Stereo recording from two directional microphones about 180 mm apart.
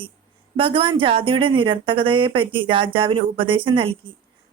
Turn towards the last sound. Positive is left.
turn(degrees=-30)  # may be behind; listen again after turning